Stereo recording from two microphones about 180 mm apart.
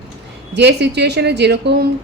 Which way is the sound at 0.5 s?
70° right (ahead or behind).